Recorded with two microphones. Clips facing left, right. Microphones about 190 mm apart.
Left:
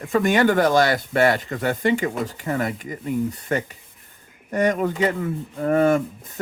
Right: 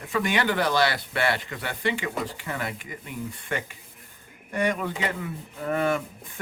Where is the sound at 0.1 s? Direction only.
45° left (ahead or behind).